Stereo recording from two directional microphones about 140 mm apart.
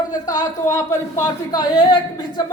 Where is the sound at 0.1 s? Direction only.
25° left (ahead or behind).